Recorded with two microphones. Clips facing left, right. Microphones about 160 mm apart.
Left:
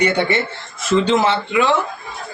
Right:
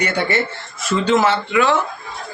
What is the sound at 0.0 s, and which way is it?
Speech, 25° left (ahead or behind).